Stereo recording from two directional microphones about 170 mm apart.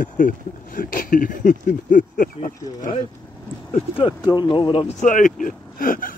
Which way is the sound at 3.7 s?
30° left (ahead or behind).